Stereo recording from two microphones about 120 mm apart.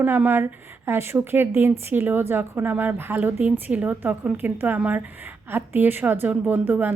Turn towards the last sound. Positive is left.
turn(degrees=-15)  # may be behind; listen again after turning